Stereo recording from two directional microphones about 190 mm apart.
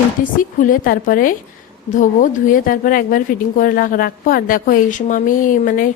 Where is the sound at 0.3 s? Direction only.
45° left (ahead or behind).